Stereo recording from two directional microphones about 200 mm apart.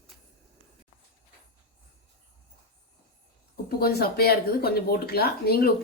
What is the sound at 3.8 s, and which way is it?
Speech, 50° left (ahead or behind).